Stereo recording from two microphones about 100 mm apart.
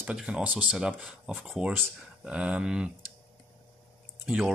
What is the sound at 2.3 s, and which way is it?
Speech, 10° right (ahead or behind).